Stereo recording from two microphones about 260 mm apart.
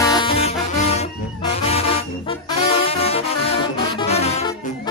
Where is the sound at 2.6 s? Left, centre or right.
Left.